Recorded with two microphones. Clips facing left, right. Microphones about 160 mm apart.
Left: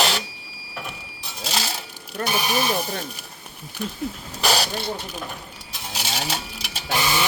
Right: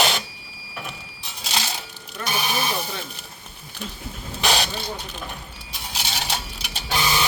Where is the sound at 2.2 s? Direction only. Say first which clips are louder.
Left 3 dB; 45° left (ahead or behind).